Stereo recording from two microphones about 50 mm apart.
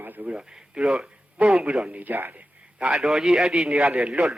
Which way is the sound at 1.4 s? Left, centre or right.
Right.